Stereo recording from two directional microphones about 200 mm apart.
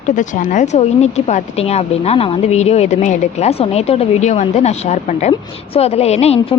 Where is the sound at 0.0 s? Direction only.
40° left (ahead or behind).